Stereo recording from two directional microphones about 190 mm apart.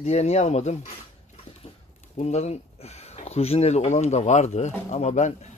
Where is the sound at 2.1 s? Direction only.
35° left (ahead or behind).